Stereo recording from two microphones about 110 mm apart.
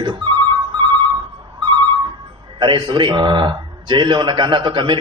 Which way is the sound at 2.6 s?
45° right (ahead or behind).